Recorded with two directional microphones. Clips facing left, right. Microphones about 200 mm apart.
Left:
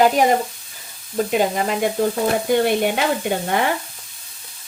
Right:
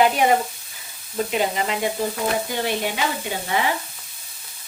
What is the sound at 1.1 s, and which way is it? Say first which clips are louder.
Sizzle: left 4 dB; 50° left (ahead or behind).